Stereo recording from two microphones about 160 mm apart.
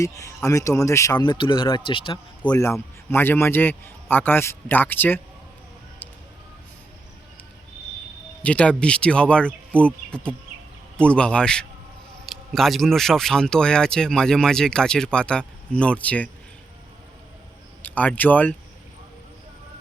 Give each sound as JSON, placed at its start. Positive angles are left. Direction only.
{"t": 0.4, "sound": "speech", "side_deg": 20}
{"t": 2.4, "sound": "a man's voice", "side_deg": 10}
{"t": 8.4, "sound": "a man's voice", "side_deg": 5}
{"t": 17.8, "sound": "speech", "side_deg": 10}